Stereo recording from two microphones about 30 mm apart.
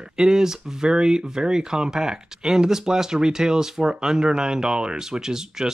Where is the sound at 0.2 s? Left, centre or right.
Right.